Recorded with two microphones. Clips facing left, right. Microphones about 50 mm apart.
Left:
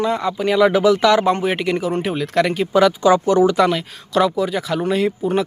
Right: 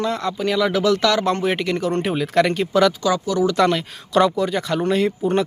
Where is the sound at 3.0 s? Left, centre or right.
Left.